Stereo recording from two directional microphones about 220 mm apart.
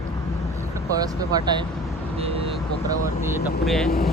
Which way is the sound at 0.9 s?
15° right (ahead or behind).